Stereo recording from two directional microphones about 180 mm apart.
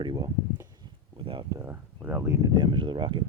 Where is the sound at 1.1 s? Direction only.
30° right (ahead or behind).